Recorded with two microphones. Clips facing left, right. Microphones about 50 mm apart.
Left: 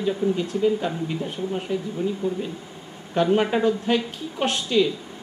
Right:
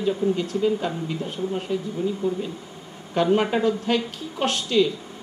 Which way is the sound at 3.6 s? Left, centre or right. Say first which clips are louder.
Left 1 dB; left.